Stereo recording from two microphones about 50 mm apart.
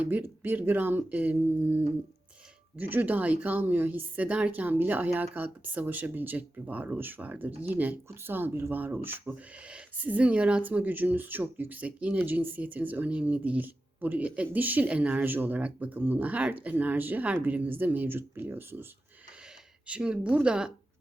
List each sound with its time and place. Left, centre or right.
0.0 s speech: right
8.1 s speech: right
10.0 s a woman's voice: right
10.6 s speech: right
12.1 s speech: right
19.9 s a woman's voice: centre